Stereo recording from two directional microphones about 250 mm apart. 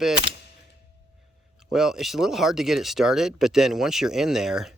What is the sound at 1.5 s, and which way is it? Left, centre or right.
Speech, centre.